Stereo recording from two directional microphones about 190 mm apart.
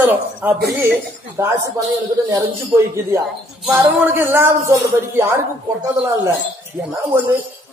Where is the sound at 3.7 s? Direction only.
10° right (ahead or behind).